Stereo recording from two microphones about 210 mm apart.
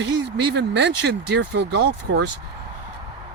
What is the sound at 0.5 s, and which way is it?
Speech, 55° right (ahead or behind).